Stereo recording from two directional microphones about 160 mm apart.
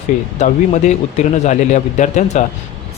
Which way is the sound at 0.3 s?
45° left (ahead or behind).